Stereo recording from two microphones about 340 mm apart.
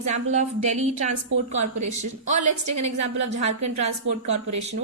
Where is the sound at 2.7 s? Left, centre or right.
Right.